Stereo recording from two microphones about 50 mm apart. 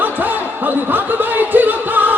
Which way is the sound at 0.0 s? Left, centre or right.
Right.